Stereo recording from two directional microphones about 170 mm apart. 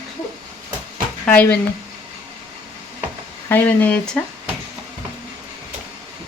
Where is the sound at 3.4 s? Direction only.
10° left (ahead or behind).